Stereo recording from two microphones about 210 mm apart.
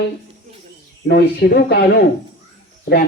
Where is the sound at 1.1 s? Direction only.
50° left (ahead or behind).